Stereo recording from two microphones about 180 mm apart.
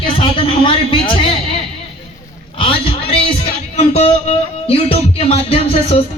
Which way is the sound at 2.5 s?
30° left (ahead or behind).